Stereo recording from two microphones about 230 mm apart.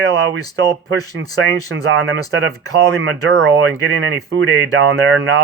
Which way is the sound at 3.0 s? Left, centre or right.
Right.